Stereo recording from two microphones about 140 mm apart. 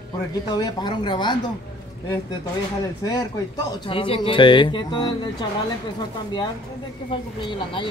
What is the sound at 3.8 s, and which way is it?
A man's voice, 40° left (ahead or behind).